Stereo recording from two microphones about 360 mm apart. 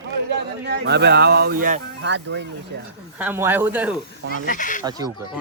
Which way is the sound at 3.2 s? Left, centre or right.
Centre.